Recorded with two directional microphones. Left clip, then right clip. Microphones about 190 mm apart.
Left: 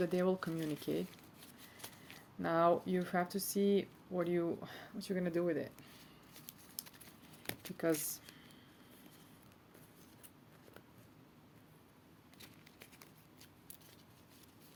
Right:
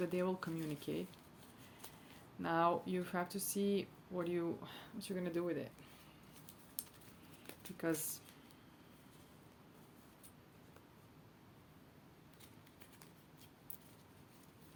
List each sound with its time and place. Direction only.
0.0 s speech: 35° left (ahead or behind)
2.4 s speech: 35° left (ahead or behind)
7.4 s speech: 35° left (ahead or behind)